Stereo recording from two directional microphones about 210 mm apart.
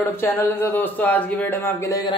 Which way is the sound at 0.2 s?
10° left (ahead or behind).